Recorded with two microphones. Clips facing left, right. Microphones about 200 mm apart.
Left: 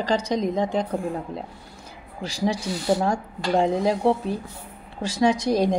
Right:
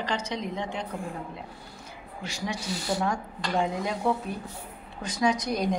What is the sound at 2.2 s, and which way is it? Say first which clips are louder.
A woman's voice: left 8 dB; 35° left (ahead or behind).